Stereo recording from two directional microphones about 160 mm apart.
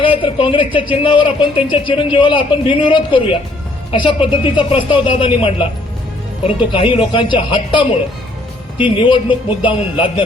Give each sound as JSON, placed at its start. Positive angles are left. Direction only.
{"t": 0.0, "sound": "speech", "side_deg": 35}